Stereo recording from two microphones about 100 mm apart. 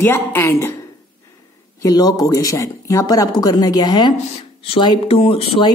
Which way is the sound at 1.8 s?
40° left (ahead or behind).